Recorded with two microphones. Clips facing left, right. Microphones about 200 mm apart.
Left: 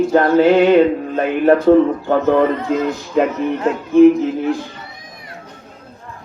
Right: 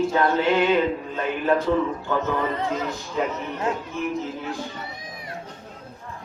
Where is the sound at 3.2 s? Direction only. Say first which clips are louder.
Left 10 dB; 75° left (ahead or behind).